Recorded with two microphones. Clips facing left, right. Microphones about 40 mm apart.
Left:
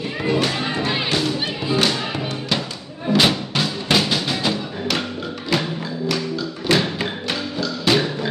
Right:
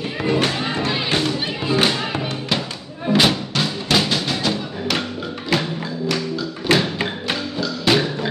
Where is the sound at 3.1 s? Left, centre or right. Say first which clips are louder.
Even; centre.